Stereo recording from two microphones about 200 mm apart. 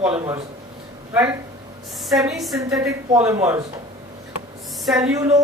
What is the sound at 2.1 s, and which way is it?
Speech, 5° right (ahead or behind).